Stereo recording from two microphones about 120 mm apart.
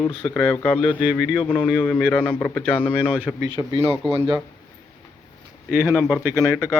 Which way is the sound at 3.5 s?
45° right (ahead or behind).